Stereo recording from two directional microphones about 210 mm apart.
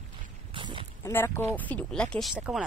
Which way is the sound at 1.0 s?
10° left (ahead or behind).